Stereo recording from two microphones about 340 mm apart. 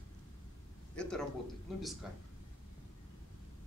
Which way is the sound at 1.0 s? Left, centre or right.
Centre.